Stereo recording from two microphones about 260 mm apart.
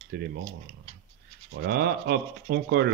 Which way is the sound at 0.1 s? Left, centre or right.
Right.